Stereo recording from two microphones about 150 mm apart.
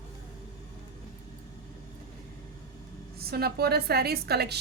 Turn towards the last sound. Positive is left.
turn(degrees=-90)